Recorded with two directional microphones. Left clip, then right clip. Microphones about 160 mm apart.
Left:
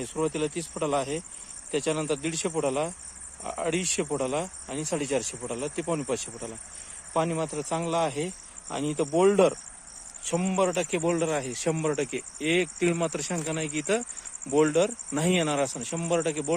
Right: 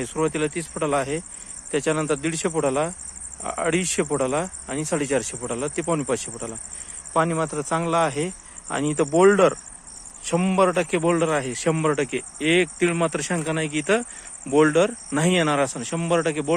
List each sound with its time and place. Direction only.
0.0 s speech: 5° left (ahead or behind)
0.9 s a man's voice: centre (ahead or behind)